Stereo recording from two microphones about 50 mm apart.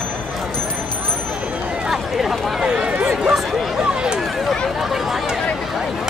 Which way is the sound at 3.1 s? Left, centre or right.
Centre.